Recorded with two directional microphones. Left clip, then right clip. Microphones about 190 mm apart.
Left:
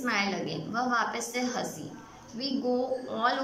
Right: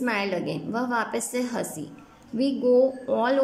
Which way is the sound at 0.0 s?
45° right (ahead or behind).